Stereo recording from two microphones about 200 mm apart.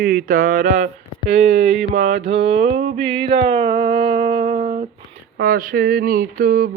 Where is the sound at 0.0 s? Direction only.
45° right (ahead or behind).